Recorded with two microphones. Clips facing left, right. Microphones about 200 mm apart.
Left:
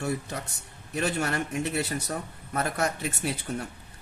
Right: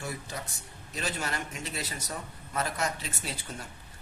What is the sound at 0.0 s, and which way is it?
A woman's voice, 65° left (ahead or behind).